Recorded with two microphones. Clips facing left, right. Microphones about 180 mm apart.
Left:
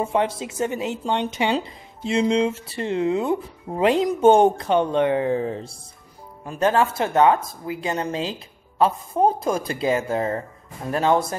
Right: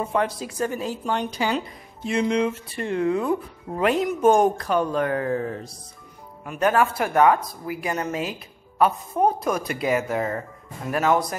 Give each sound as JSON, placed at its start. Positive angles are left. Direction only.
{"t": 0.0, "sound": "speech", "side_deg": 25}